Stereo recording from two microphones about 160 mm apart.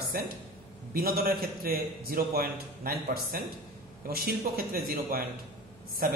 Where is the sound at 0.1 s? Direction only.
70° right (ahead or behind).